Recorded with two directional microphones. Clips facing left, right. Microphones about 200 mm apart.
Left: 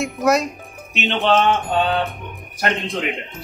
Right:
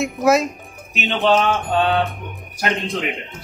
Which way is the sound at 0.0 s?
Centre (ahead or behind).